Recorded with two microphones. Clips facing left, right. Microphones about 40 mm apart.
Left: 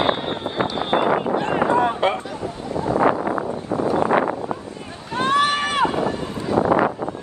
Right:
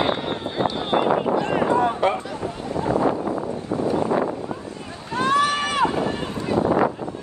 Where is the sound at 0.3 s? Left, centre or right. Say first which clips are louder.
Left 1 dB; left.